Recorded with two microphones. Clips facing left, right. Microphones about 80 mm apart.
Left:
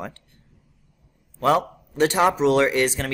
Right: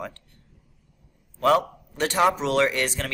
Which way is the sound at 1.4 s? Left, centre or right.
Centre.